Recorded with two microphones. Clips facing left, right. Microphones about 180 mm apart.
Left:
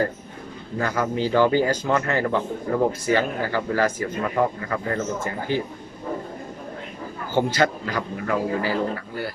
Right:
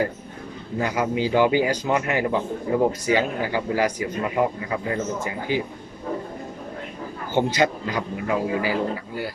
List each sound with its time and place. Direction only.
0.8 s a man's voice: 15° right (ahead or behind)
7.3 s a man's voice: 20° right (ahead or behind)